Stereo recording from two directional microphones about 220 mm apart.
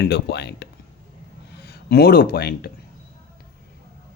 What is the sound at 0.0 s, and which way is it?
Speech, 50° left (ahead or behind).